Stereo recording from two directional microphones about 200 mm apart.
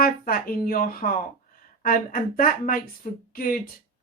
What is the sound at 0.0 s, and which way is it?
Speech, 45° left (ahead or behind).